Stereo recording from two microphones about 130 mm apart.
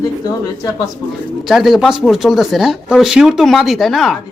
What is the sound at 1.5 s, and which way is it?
Speech, centre (ahead or behind).